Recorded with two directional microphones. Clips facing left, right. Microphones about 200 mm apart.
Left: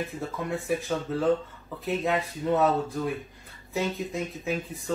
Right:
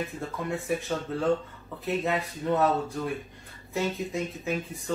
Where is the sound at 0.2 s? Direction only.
Centre (ahead or behind).